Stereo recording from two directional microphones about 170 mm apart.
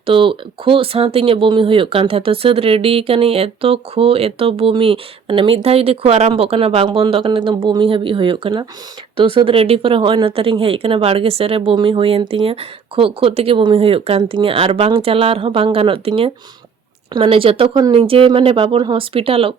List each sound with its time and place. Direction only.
0.0 s speech: 30° right (ahead or behind)